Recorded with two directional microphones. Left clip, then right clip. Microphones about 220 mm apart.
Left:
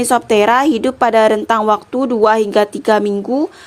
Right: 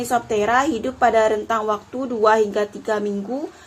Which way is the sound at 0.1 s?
45° left (ahead or behind).